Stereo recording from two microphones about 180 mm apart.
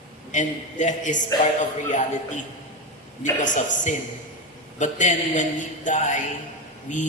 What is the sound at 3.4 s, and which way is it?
Mantra, 45° left (ahead or behind).